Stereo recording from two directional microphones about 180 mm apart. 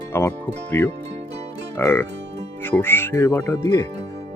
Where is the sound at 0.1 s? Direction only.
10° left (ahead or behind).